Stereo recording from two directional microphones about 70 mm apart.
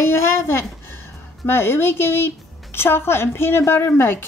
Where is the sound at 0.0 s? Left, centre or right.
Left.